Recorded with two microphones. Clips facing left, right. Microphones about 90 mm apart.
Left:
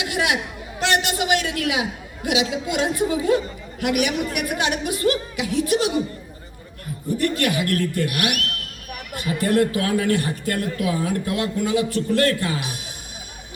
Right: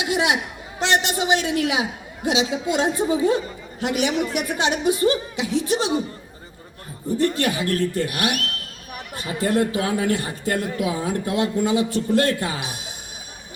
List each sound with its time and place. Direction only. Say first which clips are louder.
0.0 s chatter: right 2 dB; 25° right (ahead or behind)
0.8 s a man's voice: even; 25° right (ahead or behind)
7.2 s a man's voice: right 1 dB; 25° right (ahead or behind)